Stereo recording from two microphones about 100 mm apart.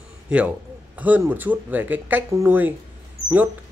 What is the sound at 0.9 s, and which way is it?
A man's voice, 15° right (ahead or behind).